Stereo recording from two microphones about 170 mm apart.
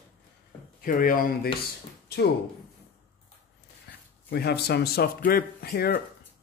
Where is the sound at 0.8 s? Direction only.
55° left (ahead or behind).